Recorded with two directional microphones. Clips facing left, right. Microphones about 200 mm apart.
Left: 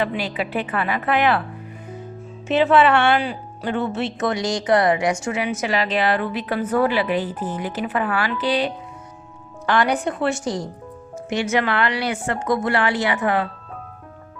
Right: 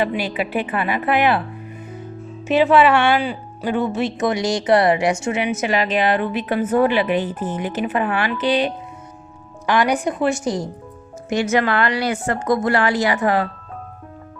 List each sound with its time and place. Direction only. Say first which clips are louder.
0.0 s a woman's voice: right 2 dB; 10° right (ahead or behind)
2.5 s a woman's voice: right 2 dB; 10° right (ahead or behind)
11.3 s a woman's voice: right 3 dB; 40° right (ahead or behind)